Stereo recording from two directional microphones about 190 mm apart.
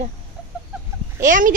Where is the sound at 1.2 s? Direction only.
45° right (ahead or behind).